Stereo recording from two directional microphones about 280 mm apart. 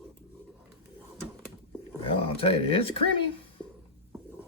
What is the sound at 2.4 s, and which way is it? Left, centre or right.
Speech, centre.